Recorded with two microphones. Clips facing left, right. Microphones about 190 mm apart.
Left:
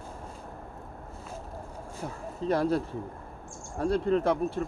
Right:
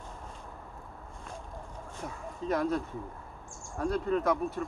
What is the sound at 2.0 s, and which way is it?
Speech, 30° left (ahead or behind).